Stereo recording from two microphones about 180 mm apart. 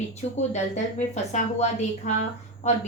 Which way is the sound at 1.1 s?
40° left (ahead or behind).